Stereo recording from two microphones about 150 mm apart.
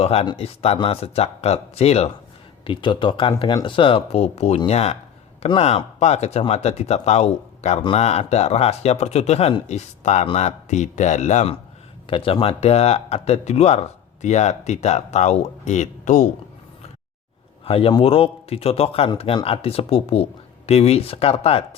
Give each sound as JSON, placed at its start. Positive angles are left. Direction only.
{"t": 0.0, "sound": "speech", "side_deg": 40}
{"t": 2.6, "sound": "speech", "side_deg": 35}
{"t": 12.0, "sound": "speech", "side_deg": 35}
{"t": 17.7, "sound": "a man's voice", "side_deg": 40}